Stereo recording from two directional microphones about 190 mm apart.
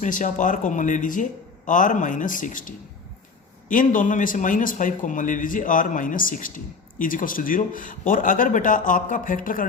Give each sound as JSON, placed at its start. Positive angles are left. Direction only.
{"t": 0.0, "sound": "speech", "side_deg": 40}